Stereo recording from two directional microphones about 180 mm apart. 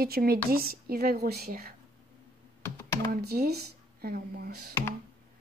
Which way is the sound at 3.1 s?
60° right (ahead or behind).